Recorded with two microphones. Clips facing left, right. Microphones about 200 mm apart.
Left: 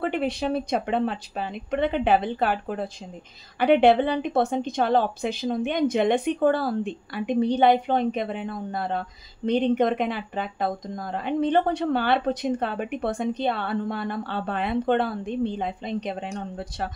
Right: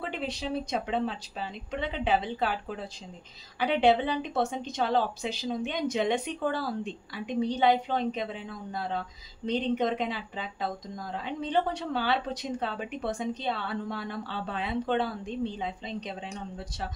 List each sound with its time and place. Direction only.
0.0 s speech: 60° left (ahead or behind)